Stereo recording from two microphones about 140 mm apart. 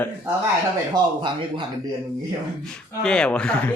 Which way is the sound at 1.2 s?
35° right (ahead or behind).